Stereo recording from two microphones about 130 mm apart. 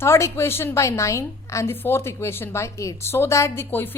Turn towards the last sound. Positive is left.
turn(degrees=15)  # may be behind; listen again after turning